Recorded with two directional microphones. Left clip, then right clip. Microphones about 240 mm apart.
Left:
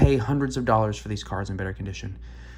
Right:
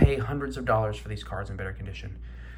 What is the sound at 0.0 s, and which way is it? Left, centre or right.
Speech, centre.